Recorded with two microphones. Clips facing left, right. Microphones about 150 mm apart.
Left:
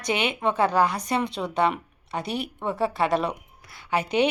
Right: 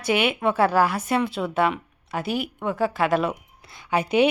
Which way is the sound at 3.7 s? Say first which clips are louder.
Right 2 dB; 15° right (ahead or behind).